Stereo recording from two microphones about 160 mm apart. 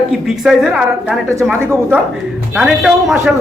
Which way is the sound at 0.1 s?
5° right (ahead or behind).